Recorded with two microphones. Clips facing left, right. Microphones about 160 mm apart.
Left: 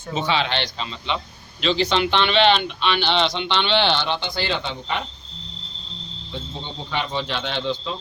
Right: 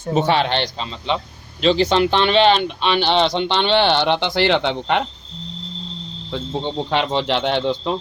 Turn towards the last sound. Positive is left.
turn(degrees=-60)  # may be behind; listen again after turning